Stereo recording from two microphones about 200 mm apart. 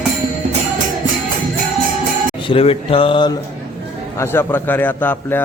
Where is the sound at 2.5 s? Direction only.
30° left (ahead or behind).